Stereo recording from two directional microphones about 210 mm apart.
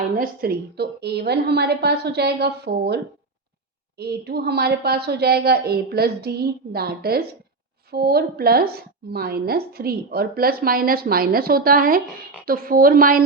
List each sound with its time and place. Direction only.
0.2 s a woman's voice: 50° right (ahead or behind)